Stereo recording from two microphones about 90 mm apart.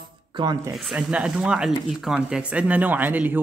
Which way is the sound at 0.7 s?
5° right (ahead or behind).